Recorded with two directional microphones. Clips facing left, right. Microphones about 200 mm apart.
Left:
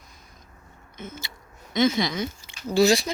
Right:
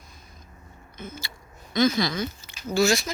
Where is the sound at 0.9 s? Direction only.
20° left (ahead or behind).